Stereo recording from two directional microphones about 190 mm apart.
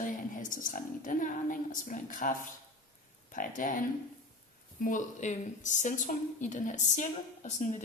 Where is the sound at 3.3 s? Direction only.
45° left (ahead or behind).